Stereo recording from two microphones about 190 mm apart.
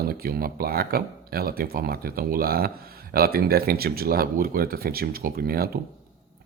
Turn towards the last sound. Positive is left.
turn(degrees=-55)  # may be behind; listen again after turning